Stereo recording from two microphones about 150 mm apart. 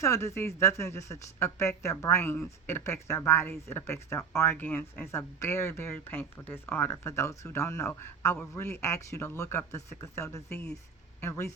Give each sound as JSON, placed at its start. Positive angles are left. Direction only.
{"t": 0.0, "sound": "a woman's voice", "side_deg": 20}